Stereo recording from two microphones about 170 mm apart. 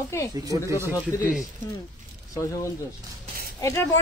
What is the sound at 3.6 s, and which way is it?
Speech, 20° left (ahead or behind).